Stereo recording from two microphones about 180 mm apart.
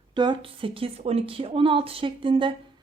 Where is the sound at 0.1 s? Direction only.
25° right (ahead or behind).